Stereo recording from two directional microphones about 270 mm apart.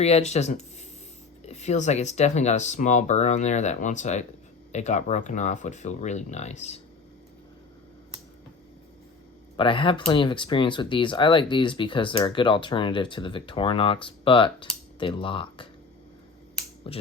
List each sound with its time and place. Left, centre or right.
0.0 s speech: left
9.6 s speech: centre
16.9 s speech: left